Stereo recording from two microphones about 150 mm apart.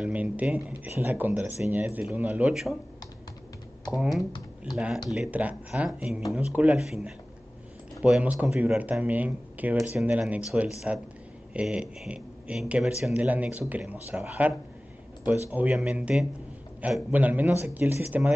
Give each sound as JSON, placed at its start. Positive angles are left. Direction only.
{"t": 0.0, "sound": "speech", "side_deg": -10}
{"t": 3.9, "sound": "speech", "side_deg": -5}
{"t": 4.2, "sound": "speech", "side_deg": 30}
{"t": 4.7, "sound": "speech", "side_deg": -5}